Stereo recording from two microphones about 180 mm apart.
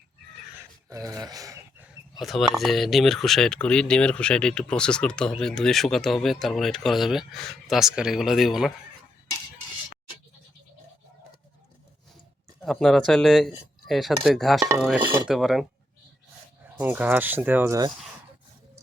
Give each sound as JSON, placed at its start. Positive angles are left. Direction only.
{"t": 0.9, "sound": "speech", "side_deg": -20}
{"t": 1.8, "sound": "speech", "side_deg": 0}
{"t": 12.5, "sound": "speech", "side_deg": 0}
{"t": 15.0, "sound": "speech", "side_deg": -10}
{"t": 15.4, "sound": "speech", "side_deg": 0}
{"t": 16.6, "sound": "speech", "side_deg": -10}